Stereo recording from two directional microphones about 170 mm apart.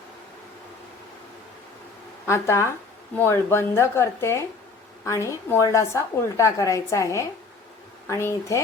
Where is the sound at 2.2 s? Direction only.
15° left (ahead or behind).